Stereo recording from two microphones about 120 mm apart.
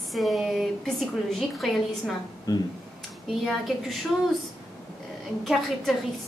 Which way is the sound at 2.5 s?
35° left (ahead or behind).